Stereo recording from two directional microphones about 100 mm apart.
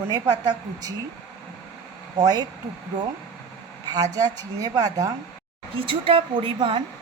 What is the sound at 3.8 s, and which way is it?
A woman's voice, 40° right (ahead or behind).